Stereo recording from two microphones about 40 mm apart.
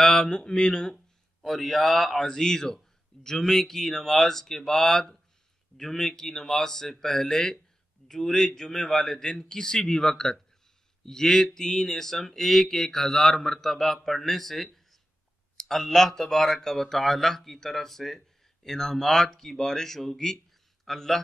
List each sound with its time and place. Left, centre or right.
0.0 s speech: centre
1.4 s speech: centre
2.1 s a man's voice: centre